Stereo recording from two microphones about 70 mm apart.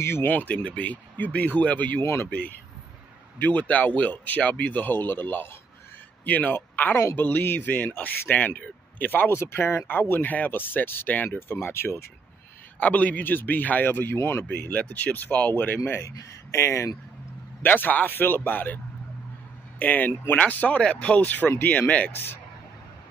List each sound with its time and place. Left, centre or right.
0.0 s speech: left
2.0 s speech: left
3.3 s speech: left
12.8 s speech: left
14.5 s speech: centre
15.8 s speech: left
17.6 s speech: left
19.8 s speech: left